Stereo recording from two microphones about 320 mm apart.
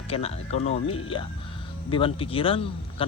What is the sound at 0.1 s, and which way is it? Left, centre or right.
Speech, centre.